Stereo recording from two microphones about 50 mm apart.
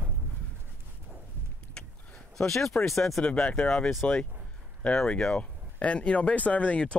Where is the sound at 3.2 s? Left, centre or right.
Centre.